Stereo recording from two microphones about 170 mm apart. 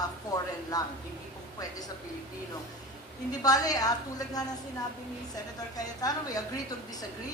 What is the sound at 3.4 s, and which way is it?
Speech, 20° left (ahead or behind).